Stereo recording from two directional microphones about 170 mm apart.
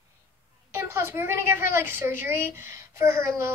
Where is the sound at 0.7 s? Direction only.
15° right (ahead or behind).